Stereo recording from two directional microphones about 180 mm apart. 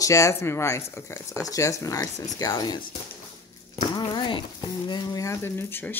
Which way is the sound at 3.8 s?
25° left (ahead or behind).